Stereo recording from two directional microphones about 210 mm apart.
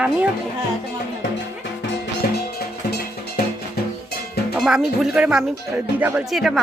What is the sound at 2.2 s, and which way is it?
Music, 45° left (ahead or behind).